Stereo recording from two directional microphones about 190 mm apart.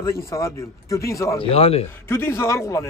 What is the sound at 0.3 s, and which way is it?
Speech, 15° left (ahead or behind).